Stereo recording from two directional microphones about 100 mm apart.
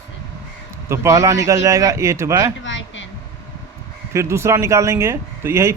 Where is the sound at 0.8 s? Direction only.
30° right (ahead or behind).